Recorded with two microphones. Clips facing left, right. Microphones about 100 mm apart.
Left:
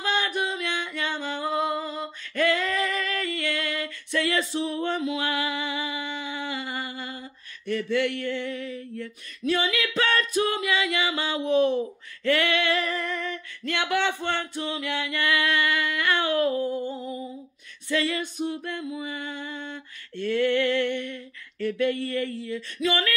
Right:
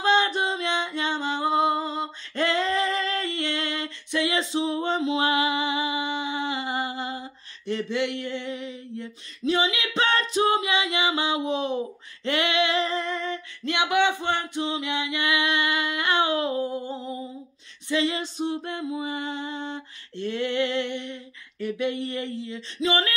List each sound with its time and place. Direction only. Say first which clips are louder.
0.0 s singing: right 5 dB; 25° right (ahead or behind)
12.3 s music: left 1 dB; 20° right (ahead or behind)